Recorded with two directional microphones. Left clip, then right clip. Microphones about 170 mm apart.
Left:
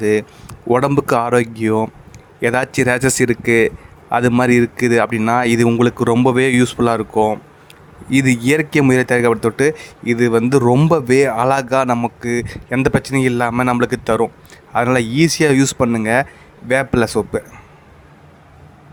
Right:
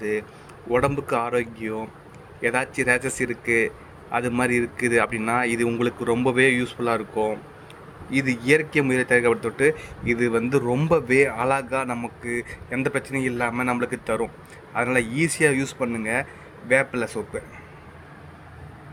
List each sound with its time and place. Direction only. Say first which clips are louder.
0.0 s speech: left 10 dB; 40° left (ahead or behind)